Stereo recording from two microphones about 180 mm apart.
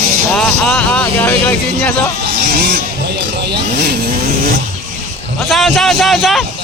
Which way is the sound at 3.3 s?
65° right (ahead or behind).